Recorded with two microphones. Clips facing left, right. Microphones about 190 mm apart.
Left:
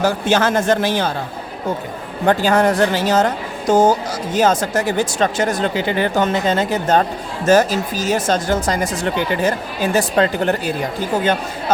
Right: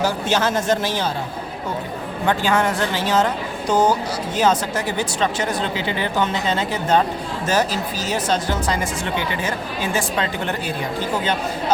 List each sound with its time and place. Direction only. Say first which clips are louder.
0.0 s a man's voice: left 4 dB; 55° left (ahead or behind)
2.2 s speech: left 5 dB; 40° left (ahead or behind)